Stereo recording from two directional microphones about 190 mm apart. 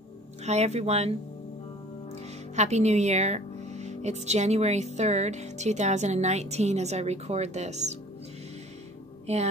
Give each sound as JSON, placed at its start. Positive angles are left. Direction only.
{"t": 0.5, "sound": "speech", "side_deg": -35}
{"t": 2.5, "sound": "speech", "side_deg": -35}